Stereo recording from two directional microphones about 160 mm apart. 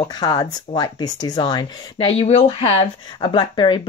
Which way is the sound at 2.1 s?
40° left (ahead or behind).